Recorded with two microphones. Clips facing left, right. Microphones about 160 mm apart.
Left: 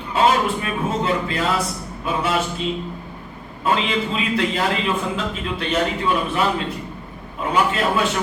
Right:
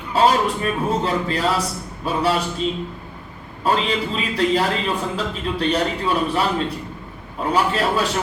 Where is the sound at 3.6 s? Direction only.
40° right (ahead or behind).